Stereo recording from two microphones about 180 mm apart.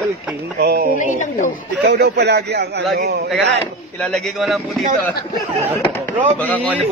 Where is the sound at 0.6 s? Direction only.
65° right (ahead or behind).